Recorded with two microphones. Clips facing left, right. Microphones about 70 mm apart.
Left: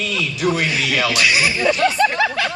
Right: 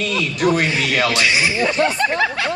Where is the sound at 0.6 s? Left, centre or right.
Right.